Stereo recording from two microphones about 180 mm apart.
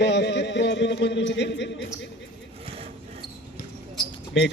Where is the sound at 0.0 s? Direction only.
75° left (ahead or behind).